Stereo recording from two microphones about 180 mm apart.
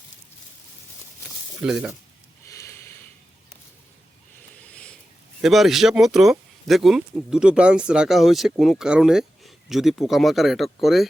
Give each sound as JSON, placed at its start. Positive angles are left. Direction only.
{"t": 1.6, "sound": "speech", "side_deg": -5}
{"t": 2.5, "sound": "sniff", "side_deg": 15}
{"t": 4.6, "sound": "a sound", "side_deg": 5}
{"t": 5.4, "sound": "speech", "side_deg": 0}